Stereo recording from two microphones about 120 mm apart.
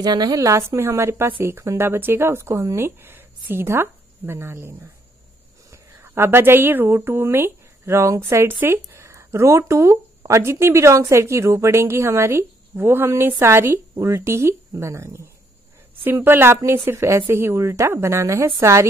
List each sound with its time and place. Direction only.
0.0 s speech: 35° right (ahead or behind)